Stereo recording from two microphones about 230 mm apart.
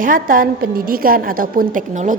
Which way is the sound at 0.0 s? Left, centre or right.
Right.